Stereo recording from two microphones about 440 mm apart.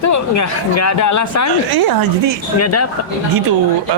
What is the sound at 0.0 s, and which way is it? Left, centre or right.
Speech, left.